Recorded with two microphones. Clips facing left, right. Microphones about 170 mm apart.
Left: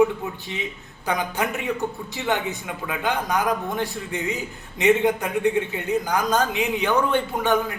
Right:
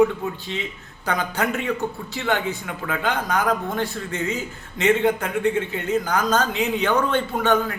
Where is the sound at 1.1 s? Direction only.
15° left (ahead or behind).